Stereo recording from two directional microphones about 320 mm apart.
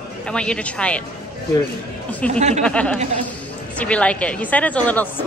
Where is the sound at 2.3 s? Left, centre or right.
Right.